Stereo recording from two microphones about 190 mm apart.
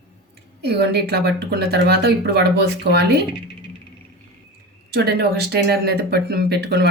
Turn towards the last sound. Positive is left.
turn(degrees=-60)  # may be behind; listen again after turning